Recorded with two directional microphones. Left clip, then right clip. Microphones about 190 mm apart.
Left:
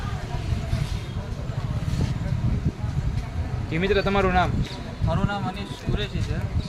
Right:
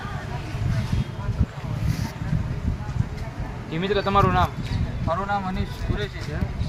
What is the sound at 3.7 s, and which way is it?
Speech, 70° left (ahead or behind).